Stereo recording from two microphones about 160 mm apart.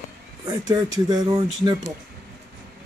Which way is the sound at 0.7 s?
25° right (ahead or behind).